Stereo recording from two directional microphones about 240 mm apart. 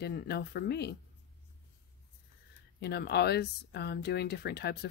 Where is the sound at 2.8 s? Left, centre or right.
Left.